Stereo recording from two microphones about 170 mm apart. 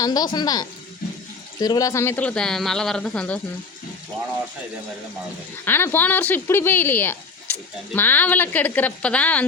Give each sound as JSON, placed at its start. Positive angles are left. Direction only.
{"t": 0.0, "sound": "speech", "side_deg": 25}
{"t": 1.0, "sound": "water", "side_deg": 55}
{"t": 1.5, "sound": "speech", "side_deg": 25}
{"t": 5.6, "sound": "speech", "side_deg": 10}